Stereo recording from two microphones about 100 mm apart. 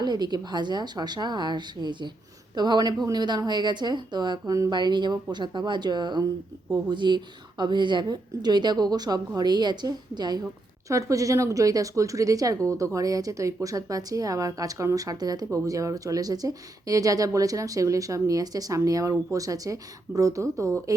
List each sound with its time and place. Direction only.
0.0 s a woman's voice: 45° right (ahead or behind)
10.8 s speech: 35° right (ahead or behind)